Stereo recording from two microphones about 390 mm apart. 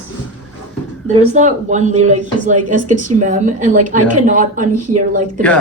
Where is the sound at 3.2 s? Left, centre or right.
Centre.